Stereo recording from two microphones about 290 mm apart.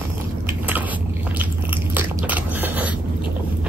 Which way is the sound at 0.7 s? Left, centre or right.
Centre.